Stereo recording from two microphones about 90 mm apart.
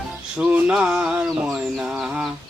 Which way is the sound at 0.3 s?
15° right (ahead or behind).